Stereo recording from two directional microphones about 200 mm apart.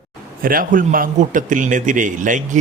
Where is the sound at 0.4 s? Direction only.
45° right (ahead or behind).